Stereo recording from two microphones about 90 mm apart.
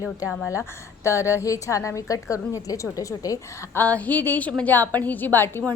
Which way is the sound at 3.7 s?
20° left (ahead or behind).